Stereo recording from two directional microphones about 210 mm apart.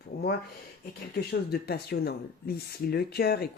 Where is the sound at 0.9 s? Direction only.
50° left (ahead or behind).